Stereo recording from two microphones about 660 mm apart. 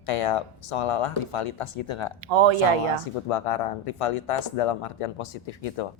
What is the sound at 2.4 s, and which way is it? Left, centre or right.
Speech, right.